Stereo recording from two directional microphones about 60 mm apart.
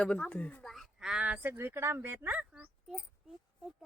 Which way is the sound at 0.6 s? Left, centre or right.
Centre.